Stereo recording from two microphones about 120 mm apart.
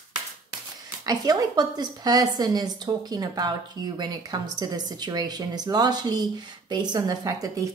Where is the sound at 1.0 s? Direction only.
35° right (ahead or behind).